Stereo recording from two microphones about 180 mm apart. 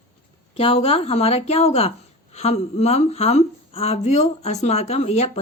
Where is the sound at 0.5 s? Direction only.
30° left (ahead or behind).